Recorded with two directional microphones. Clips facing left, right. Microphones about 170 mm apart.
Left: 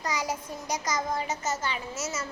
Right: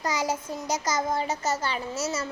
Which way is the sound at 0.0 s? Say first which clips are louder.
Right 3 dB; 25° right (ahead or behind).